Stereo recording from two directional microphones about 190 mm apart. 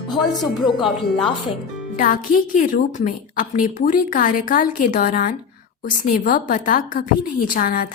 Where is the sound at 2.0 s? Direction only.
45° left (ahead or behind).